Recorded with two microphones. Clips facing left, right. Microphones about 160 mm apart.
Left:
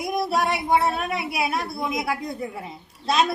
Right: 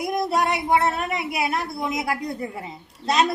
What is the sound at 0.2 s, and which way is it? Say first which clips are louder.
Child singing: even; 5° left (ahead or behind).